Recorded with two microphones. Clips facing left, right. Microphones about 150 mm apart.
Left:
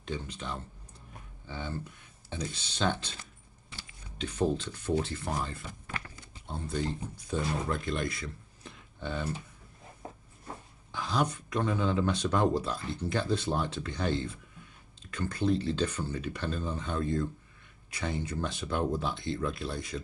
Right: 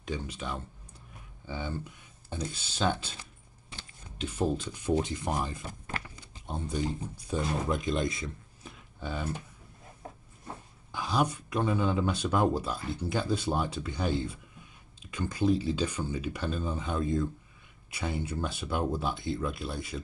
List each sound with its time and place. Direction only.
0.0 s speech: 5° right (ahead or behind)
5.7 s walk: 40° right (ahead or behind)
6.4 s speech: 15° right (ahead or behind)
8.6 s a sound: 5° right (ahead or behind)
10.9 s speech: 10° right (ahead or behind)